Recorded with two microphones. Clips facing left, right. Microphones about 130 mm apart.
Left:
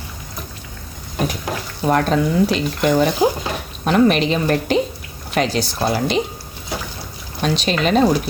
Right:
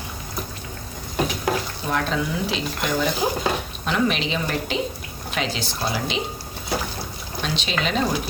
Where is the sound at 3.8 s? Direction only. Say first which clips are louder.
Left 8 dB; 50° left (ahead or behind).